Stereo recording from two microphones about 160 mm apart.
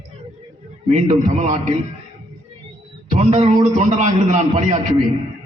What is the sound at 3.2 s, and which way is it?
A man's voice, 50° right (ahead or behind).